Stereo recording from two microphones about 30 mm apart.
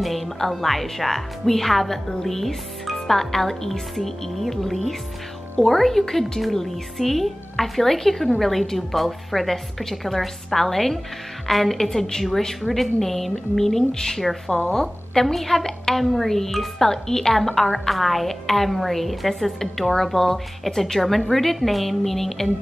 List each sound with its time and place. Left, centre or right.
0.0 s music: centre
0.5 s a woman's voice: centre